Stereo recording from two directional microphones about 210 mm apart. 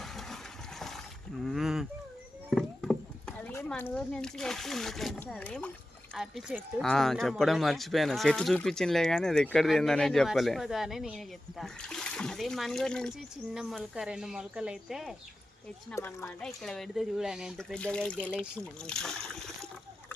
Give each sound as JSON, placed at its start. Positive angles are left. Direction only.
{"t": 0.0, "sound": "a sound", "side_deg": 0}
{"t": 0.8, "sound": "boat", "side_deg": 0}
{"t": 1.5, "sound": "livestock", "side_deg": 0}
{"t": 2.5, "sound": "speech", "side_deg": 0}
{"t": 15.9, "sound": "speech", "side_deg": 10}